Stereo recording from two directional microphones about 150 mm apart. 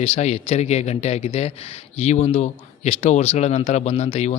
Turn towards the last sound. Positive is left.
turn(degrees=45)  # may be behind; listen again after turning